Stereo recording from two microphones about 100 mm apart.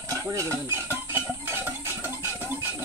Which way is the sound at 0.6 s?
25° right (ahead or behind).